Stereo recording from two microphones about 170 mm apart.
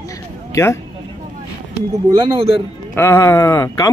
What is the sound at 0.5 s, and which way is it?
Speech, 15° left (ahead or behind).